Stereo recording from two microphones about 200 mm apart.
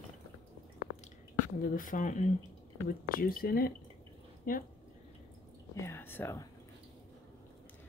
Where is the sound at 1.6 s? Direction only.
45° left (ahead or behind).